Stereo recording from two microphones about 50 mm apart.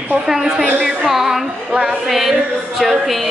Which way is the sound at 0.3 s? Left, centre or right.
Centre.